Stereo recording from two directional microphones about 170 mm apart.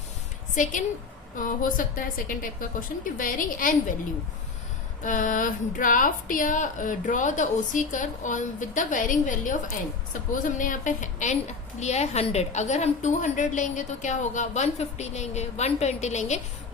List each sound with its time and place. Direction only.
0.5 s a woman's voice: 45° left (ahead or behind)
5.0 s a woman's voice: 50° left (ahead or behind)